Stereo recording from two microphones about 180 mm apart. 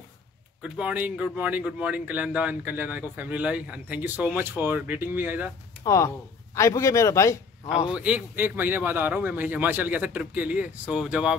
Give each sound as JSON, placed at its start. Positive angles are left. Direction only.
{"t": 0.6, "sound": "speech", "side_deg": -5}
{"t": 5.9, "sound": "a man's voice", "side_deg": 15}
{"t": 7.9, "sound": "speech", "side_deg": -5}